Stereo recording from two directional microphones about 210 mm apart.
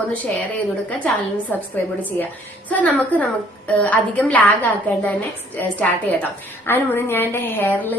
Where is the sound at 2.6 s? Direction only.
5° left (ahead or behind).